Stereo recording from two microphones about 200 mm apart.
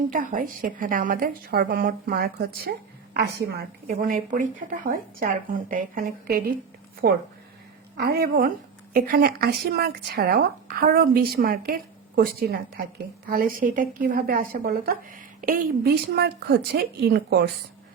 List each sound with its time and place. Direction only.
0.1 s a woman's voice: 40° right (ahead or behind)